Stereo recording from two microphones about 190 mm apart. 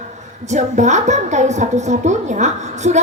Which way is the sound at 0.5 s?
40° right (ahead or behind).